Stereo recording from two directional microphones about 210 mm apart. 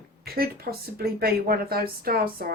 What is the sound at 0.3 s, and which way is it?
Speech, 45° right (ahead or behind).